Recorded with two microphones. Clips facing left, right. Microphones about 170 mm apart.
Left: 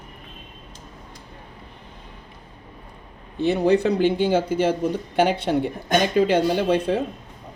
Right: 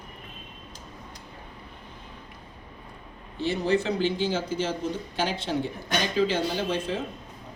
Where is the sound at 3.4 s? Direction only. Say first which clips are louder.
Left 7 dB; 60° left (ahead or behind).